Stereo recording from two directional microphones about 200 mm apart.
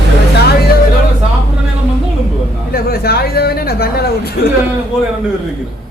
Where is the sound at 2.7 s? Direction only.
50° left (ahead or behind).